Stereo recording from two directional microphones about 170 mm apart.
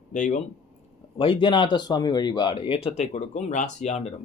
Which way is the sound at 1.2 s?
30° left (ahead or behind).